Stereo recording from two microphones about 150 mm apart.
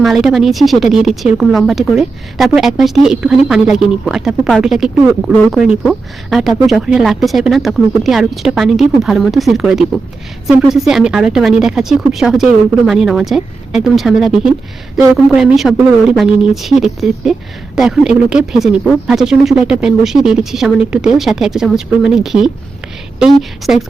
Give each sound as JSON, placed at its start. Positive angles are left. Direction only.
{"t": 0.0, "sound": "speech", "side_deg": 0}